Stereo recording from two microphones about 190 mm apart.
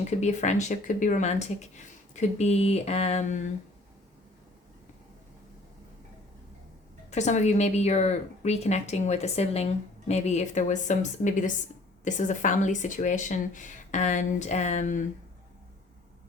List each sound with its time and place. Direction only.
0.0 s speech: 35° left (ahead or behind)
7.1 s speech: 40° left (ahead or behind)